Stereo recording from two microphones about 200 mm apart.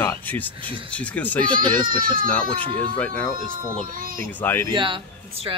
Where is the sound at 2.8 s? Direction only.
10° left (ahead or behind).